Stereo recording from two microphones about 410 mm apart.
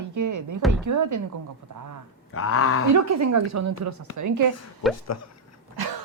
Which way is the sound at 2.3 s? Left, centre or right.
Left.